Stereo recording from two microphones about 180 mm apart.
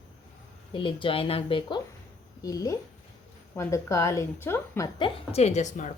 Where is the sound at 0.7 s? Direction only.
30° left (ahead or behind).